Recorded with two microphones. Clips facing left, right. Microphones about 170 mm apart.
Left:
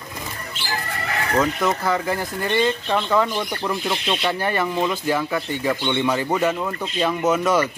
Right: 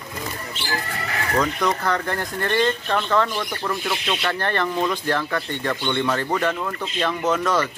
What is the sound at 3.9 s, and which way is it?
Speech, centre (ahead or behind).